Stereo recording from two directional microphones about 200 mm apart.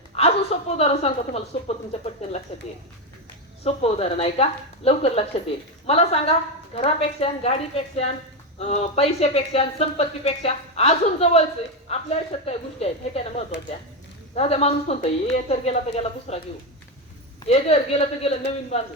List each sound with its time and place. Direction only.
0.2 s a woman's voice: 30° left (ahead or behind)
3.6 s a woman's voice: 30° left (ahead or behind)
13.5 s speech: 55° left (ahead or behind)
14.3 s a woman's voice: 30° left (ahead or behind)
17.4 s a woman's voice: 30° left (ahead or behind)